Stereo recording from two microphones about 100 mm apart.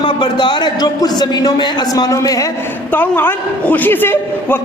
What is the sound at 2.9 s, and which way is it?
A man's voice, 20° left (ahead or behind).